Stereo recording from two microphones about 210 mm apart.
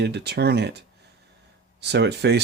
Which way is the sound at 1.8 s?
55° right (ahead or behind).